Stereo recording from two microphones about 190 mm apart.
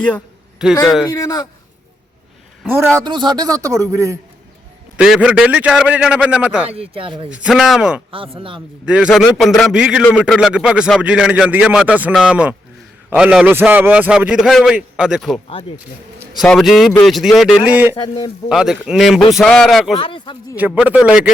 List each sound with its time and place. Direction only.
0.6 s speech: 5° right (ahead or behind)
1.0 s a man's voice: 15° left (ahead or behind)
2.6 s a man's voice: 10° right (ahead or behind)
4.9 s speech: 5° right (ahead or behind)
6.7 s speech: 30° right (ahead or behind)
7.3 s speech: 5° right (ahead or behind)
8.1 s speech: 30° right (ahead or behind)
8.9 s speech: 5° right (ahead or behind)
17.9 s speech: 25° left (ahead or behind)
18.4 s speech: centre (ahead or behind)
20.0 s speech: 25° left (ahead or behind)
20.6 s a man's voice: 5° right (ahead or behind)